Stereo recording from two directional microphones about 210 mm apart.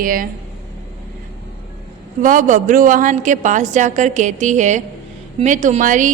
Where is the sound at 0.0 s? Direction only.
40° right (ahead or behind).